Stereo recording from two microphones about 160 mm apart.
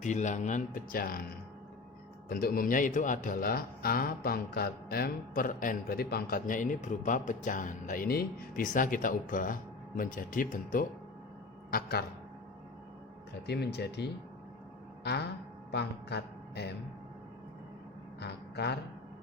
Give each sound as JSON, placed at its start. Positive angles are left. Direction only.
{"t": 0.0, "sound": "speech", "side_deg": 50}
{"t": 2.3, "sound": "speech", "side_deg": 65}
{"t": 11.7, "sound": "a man's voice", "side_deg": 75}
{"t": 13.5, "sound": "speech", "side_deg": 90}
{"t": 15.7, "sound": "speech", "side_deg": 90}
{"t": 18.2, "sound": "speech", "side_deg": 90}